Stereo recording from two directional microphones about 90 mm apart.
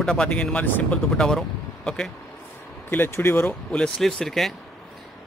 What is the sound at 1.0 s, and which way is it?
Speech, 5° left (ahead or behind).